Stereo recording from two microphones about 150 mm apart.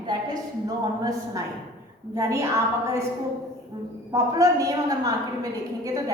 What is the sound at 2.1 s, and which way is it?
Speech, 20° right (ahead or behind).